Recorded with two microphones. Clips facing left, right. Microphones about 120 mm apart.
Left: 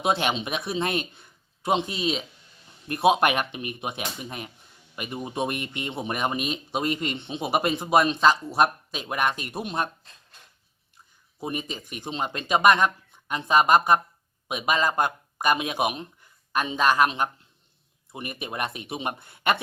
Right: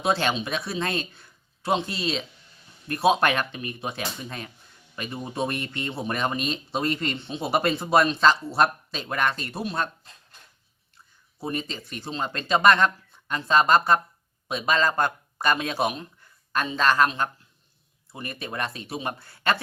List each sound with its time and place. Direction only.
0.0 s speech: 20° left (ahead or behind)
10.9 s speech: 15° left (ahead or behind)